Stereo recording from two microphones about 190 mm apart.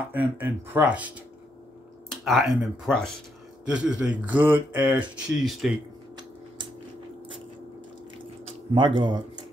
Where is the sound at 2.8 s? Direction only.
5° left (ahead or behind).